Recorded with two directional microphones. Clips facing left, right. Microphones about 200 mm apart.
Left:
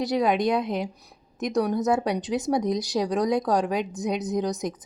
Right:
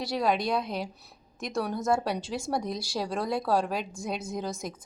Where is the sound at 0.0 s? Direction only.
20° left (ahead or behind).